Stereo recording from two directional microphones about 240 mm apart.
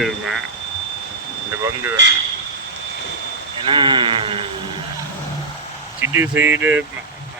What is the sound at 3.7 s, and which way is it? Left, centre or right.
Speech, centre.